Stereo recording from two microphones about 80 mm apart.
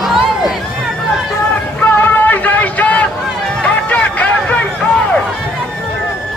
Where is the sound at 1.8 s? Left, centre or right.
Left.